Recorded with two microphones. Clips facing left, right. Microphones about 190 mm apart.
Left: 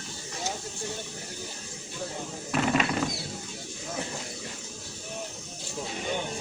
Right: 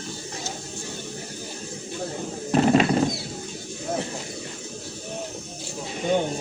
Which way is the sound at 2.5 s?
35° right (ahead or behind).